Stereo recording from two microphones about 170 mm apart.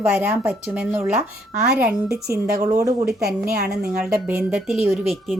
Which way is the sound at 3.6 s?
70° right (ahead or behind).